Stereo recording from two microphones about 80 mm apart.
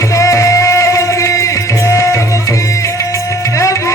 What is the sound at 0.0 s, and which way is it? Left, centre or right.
Music, left.